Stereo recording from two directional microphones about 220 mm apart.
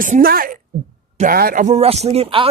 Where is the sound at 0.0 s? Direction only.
40° right (ahead or behind).